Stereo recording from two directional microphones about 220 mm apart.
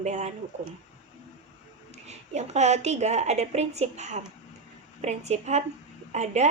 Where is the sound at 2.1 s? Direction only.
30° right (ahead or behind).